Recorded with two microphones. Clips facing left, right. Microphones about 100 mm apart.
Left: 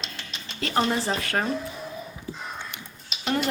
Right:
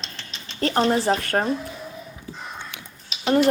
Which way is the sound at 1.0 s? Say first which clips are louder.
Right 5 dB; 45° right (ahead or behind).